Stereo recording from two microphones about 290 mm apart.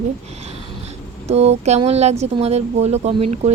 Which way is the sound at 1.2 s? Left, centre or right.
Right.